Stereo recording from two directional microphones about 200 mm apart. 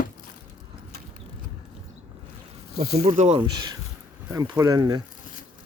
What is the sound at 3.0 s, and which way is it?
Speech, 35° right (ahead or behind).